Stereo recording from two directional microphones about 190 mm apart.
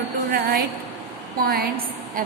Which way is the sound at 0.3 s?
50° right (ahead or behind).